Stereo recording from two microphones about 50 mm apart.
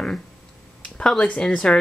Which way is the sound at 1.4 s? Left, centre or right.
Centre.